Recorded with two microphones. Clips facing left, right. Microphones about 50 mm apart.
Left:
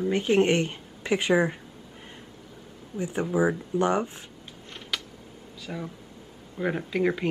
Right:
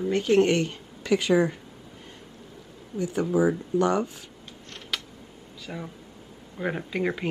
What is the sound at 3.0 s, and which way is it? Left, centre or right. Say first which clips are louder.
A woman's voice: right 2 dB; left.